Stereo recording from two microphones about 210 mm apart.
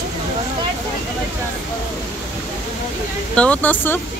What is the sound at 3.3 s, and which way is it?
Speech, 5° left (ahead or behind).